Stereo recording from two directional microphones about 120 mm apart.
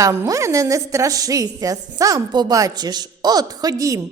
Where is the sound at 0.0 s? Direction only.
25° right (ahead or behind).